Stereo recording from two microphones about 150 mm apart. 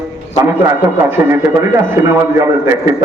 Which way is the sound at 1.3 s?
15° right (ahead or behind).